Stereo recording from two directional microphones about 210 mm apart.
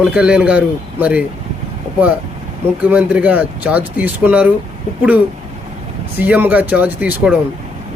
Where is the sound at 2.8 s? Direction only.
5° right (ahead or behind).